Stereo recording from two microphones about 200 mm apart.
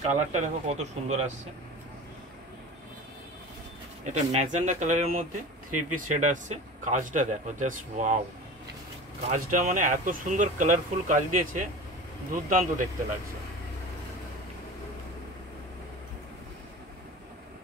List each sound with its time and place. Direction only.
0.0 s speech: 35° right (ahead or behind)
4.0 s speech: 35° right (ahead or behind)
9.3 s speech: 40° right (ahead or behind)